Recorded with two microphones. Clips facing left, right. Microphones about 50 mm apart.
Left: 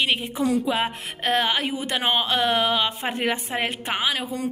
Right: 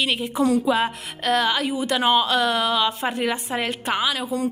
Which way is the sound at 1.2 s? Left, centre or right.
Left.